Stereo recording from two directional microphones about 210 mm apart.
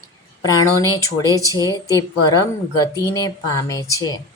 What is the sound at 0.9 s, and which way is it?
Speech, 15° left (ahead or behind).